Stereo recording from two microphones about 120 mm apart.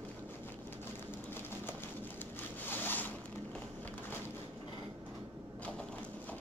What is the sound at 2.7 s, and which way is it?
Zipper, 15° left (ahead or behind).